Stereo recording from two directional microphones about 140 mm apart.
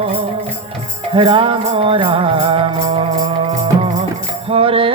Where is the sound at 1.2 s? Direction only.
40° right (ahead or behind).